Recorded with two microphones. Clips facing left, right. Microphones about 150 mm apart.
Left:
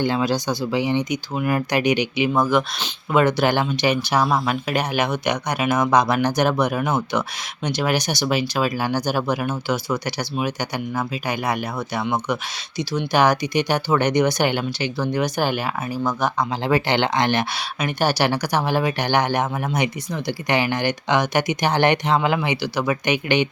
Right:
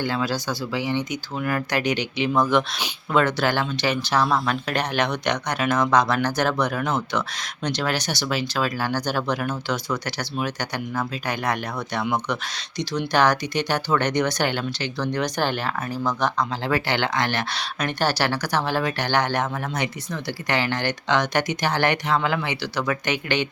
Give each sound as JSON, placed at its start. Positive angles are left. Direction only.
{"t": 0.0, "sound": "speech", "side_deg": 20}